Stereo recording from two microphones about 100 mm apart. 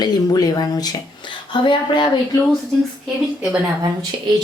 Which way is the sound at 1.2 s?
55° left (ahead or behind).